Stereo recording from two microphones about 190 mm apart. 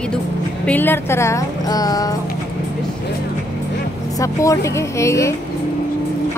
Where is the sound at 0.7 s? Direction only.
10° left (ahead or behind).